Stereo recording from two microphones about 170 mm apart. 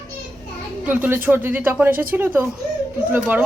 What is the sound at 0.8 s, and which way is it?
Speech, 10° right (ahead or behind).